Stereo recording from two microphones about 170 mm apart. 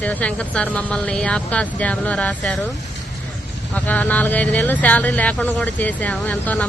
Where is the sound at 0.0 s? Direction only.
10° left (ahead or behind).